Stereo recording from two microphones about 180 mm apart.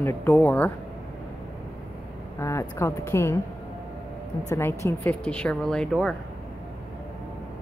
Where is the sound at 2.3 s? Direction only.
15° left (ahead or behind).